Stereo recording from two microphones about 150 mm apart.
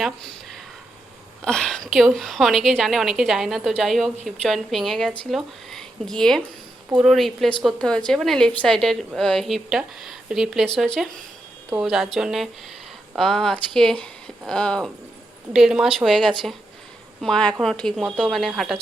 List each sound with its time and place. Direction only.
0.0 s a woman's voice: centre (ahead or behind)